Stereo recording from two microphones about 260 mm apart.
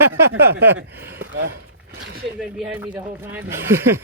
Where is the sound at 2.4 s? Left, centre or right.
Centre.